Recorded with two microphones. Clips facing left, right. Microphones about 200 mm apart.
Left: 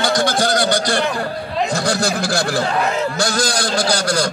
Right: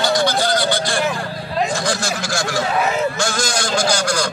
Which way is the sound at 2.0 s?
35° left (ahead or behind).